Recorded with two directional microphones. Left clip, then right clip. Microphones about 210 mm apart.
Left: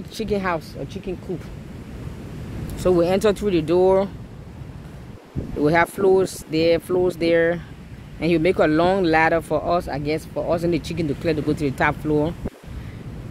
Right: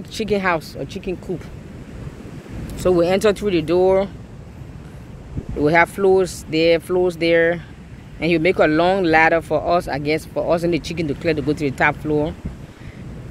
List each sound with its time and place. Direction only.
0.1 s speech: 5° right (ahead or behind)
2.8 s speech: centre (ahead or behind)
5.6 s speech: centre (ahead or behind)